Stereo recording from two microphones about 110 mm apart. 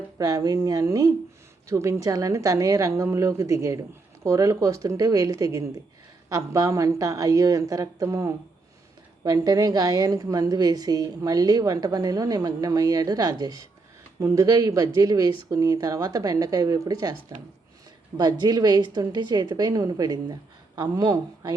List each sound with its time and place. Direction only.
0.2 s a woman's voice: 35° right (ahead or behind)